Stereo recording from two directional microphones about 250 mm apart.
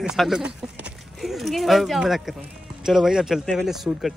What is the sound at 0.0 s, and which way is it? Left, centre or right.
Speech, centre.